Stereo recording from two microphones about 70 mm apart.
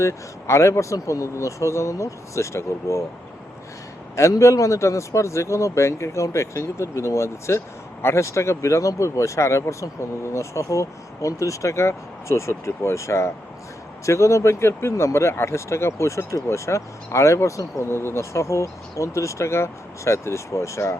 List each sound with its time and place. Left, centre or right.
0.0 s speech: left
4.1 s speech: left